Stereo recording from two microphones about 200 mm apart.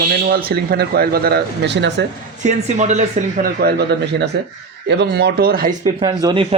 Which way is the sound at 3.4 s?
50° right (ahead or behind).